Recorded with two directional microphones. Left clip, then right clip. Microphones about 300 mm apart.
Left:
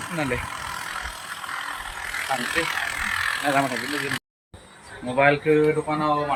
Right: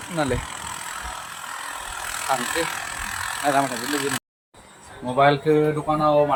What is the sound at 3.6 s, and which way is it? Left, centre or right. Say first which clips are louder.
Speech: right 1 dB; centre.